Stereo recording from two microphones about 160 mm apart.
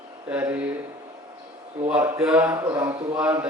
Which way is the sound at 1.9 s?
10° right (ahead or behind).